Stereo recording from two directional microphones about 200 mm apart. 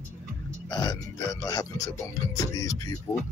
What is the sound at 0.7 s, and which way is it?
Speech, 20° left (ahead or behind).